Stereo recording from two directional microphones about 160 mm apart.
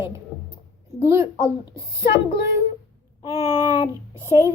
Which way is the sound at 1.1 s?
15° right (ahead or behind).